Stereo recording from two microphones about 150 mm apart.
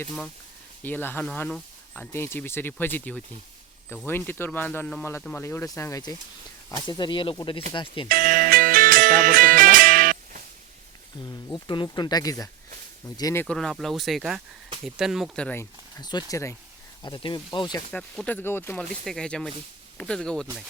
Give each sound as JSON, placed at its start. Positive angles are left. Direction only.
{"t": 0.8, "sound": "speech", "side_deg": 15}
{"t": 8.1, "sound": "music", "side_deg": -70}
{"t": 11.3, "sound": "speech", "side_deg": 25}
{"t": 13.4, "sound": "speech", "side_deg": 5}
{"t": 16.0, "sound": "speech", "side_deg": 30}
{"t": 17.0, "sound": "speech", "side_deg": 30}
{"t": 17.9, "sound": "speech", "side_deg": 10}